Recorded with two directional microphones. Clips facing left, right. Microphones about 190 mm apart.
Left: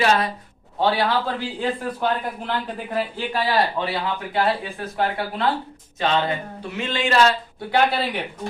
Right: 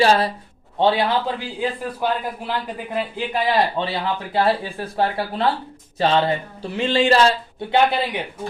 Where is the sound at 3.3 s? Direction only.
20° right (ahead or behind).